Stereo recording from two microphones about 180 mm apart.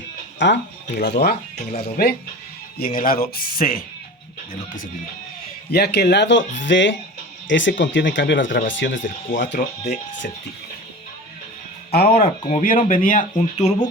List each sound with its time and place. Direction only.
0.3 s speech: 75° left (ahead or behind)
1.5 s speech: 40° left (ahead or behind)
2.7 s speech: 55° left (ahead or behind)
5.7 s a man's voice: 60° left (ahead or behind); by 6.4 s 75° left (ahead or behind)
6.5 s speech: 90° left
9.0 s speech: 45° left (ahead or behind)
11.9 s speech: 55° left (ahead or behind); by 13.7 s 40° left (ahead or behind)